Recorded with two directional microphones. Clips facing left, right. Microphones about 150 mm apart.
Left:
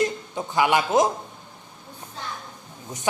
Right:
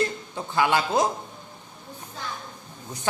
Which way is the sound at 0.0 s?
15° left (ahead or behind).